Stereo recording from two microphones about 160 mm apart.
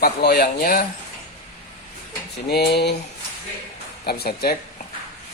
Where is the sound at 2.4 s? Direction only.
90° left.